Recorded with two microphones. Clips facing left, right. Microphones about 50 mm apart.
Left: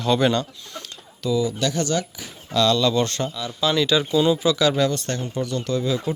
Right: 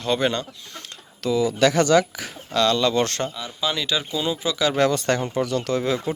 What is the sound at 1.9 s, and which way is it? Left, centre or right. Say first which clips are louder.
Speech: right 7 dB; right.